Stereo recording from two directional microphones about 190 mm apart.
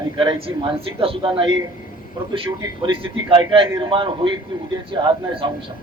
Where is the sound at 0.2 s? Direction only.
30° right (ahead or behind).